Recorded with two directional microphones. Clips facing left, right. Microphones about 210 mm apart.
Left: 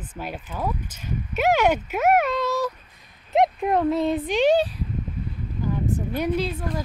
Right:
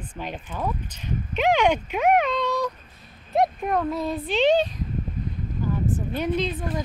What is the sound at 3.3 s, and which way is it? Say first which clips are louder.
Speech: left 2 dB; 25° left (ahead or behind).